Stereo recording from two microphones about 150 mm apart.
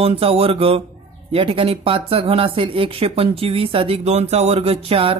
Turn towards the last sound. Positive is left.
turn(degrees=-40)  # may be behind; listen again after turning